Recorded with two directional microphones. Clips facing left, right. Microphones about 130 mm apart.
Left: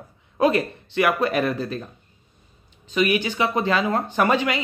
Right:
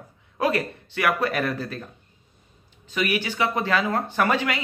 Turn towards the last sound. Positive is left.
turn(degrees=20)  # may be behind; listen again after turning